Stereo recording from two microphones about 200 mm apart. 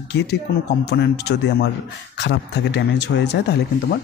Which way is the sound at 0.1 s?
55° left (ahead or behind).